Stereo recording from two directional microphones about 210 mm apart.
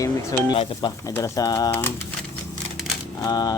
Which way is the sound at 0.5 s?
25° left (ahead or behind).